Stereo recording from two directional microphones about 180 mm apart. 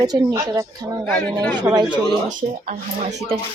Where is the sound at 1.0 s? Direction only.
5° left (ahead or behind).